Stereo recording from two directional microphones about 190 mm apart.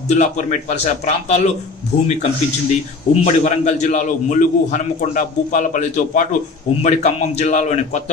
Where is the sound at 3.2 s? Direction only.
40° left (ahead or behind).